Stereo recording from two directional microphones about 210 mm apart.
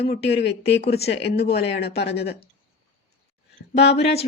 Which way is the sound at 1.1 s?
55° left (ahead or behind).